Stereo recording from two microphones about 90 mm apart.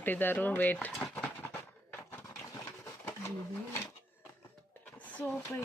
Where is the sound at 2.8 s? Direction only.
30° left (ahead or behind).